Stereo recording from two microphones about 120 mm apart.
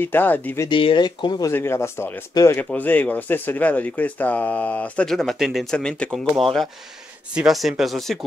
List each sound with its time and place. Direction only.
0.0 s speech: 15° left (ahead or behind)
0.7 s speech: 45° left (ahead or behind)
1.5 s speech: 20° left (ahead or behind)
2.6 s speech: 15° left (ahead or behind)